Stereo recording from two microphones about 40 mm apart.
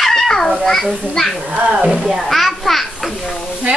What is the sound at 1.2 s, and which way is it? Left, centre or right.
Speech, centre.